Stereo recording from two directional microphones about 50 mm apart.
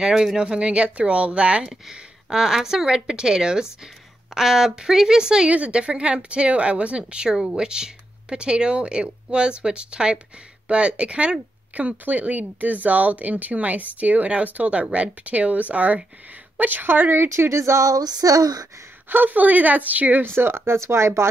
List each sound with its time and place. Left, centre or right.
0.0 s a woman's voice: centre
1.7 s a woman's voice: centre; by 17.3 s right
17.3 s speech: right
19.0 s speech: right
20.3 s speech: right